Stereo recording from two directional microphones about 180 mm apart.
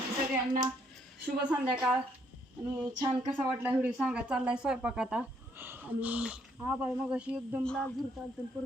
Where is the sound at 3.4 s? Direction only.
10° right (ahead or behind).